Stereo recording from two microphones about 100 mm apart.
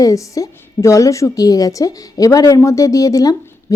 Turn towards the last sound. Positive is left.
turn(degrees=35)  # may be behind; listen again after turning